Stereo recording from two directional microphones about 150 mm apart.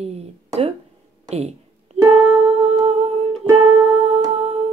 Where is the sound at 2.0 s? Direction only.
45° right (ahead or behind).